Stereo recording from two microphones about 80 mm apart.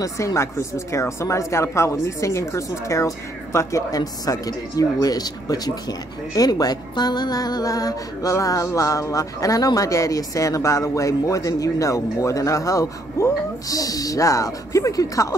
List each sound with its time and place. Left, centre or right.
0.0 s speech: left